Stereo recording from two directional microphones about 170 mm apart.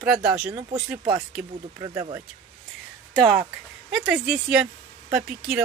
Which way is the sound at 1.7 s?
25° right (ahead or behind).